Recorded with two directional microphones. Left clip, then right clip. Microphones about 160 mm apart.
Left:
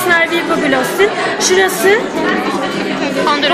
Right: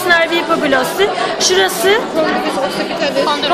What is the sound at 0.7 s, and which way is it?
Speech, 20° right (ahead or behind).